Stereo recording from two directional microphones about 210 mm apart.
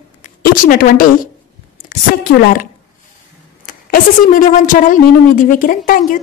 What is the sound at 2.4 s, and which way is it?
Speech, 40° left (ahead or behind).